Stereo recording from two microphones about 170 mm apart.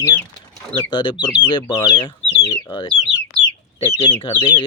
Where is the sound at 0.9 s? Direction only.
25° left (ahead or behind).